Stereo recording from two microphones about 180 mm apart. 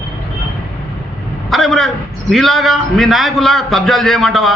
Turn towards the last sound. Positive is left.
turn(degrees=0)  # may be behind; listen again after turning